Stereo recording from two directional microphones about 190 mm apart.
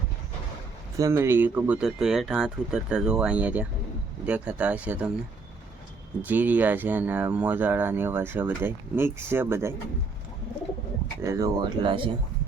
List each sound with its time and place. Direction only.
0.9 s speech: 15° right (ahead or behind)
6.2 s speech: 10° right (ahead or behind)
11.2 s speech: 15° right (ahead or behind)